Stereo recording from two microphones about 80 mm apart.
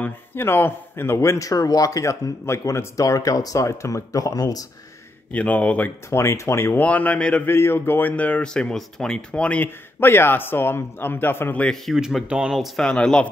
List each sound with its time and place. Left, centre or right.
0.0 s speech: left
5.3 s speech: centre
6.0 s speech: left
6.8 s speech: centre
7.4 s speech: left
8.2 s speech: centre
9.9 s speech: left
11.7 s speech: centre
12.5 s speech: centre
12.8 s speech: centre